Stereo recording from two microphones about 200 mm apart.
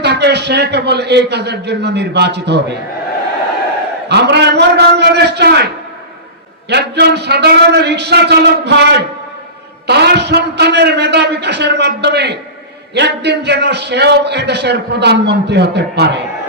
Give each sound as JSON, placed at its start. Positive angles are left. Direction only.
{"t": 0.0, "sound": "a man's voice", "side_deg": -55}
{"t": 4.1, "sound": "a man's voice", "side_deg": -55}
{"t": 6.7, "sound": "a man's voice", "side_deg": -55}